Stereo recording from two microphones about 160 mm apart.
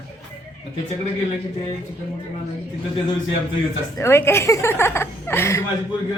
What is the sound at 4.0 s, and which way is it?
A woman's voice, 15° left (ahead or behind).